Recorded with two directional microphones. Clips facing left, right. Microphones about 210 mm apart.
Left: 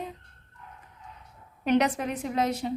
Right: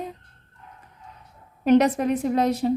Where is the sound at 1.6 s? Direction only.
40° right (ahead or behind).